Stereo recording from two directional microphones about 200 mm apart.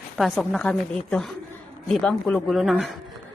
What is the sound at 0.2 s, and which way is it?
A woman's voice, centre (ahead or behind).